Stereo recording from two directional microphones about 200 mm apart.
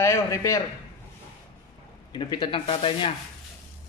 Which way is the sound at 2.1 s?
20° left (ahead or behind).